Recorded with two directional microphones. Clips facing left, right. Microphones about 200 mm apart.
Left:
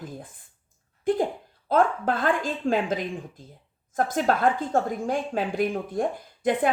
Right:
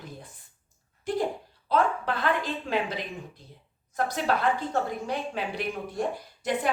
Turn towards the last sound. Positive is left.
turn(degrees=50)  # may be behind; listen again after turning